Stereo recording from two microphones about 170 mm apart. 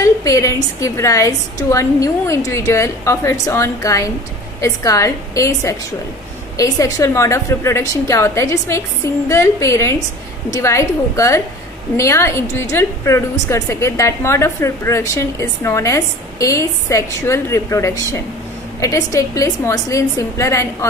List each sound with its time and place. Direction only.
0.0 s a woman's voice: 20° left (ahead or behind)